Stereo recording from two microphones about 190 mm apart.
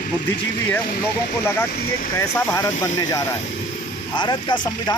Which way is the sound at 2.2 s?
15° left (ahead or behind).